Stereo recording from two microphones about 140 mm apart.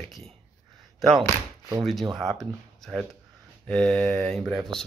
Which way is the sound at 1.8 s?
Centre (ahead or behind).